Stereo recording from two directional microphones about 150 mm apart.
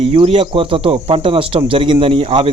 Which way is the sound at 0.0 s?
40° right (ahead or behind).